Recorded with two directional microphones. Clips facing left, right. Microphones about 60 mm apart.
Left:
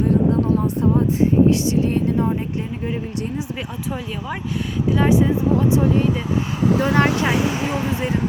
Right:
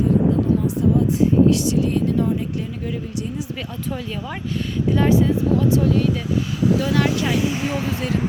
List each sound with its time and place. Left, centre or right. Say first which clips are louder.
0.5 s speech: even; left
4.9 s speech: even; centre
5.1 s speech: left 1 dB; left
6.6 s speech: left 2 dB; left
7.6 s speech: left 1 dB; centre